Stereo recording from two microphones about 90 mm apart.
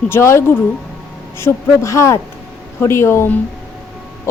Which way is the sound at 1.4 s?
30° left (ahead or behind).